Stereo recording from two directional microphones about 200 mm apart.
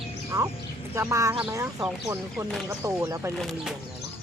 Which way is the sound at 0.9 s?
15° right (ahead or behind).